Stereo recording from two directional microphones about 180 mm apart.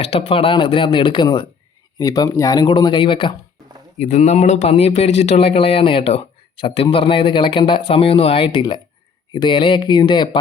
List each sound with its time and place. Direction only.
0.0 s speech: 35° left (ahead or behind)